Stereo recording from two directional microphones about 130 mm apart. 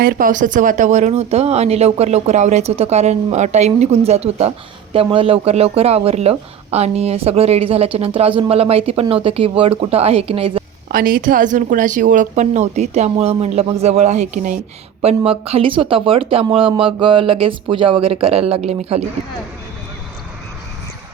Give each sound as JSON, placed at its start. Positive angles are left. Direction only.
{"t": 0.0, "sound": "speech", "side_deg": -90}
{"t": 11.0, "sound": "speech", "side_deg": -90}
{"t": 15.0, "sound": "speech", "side_deg": -50}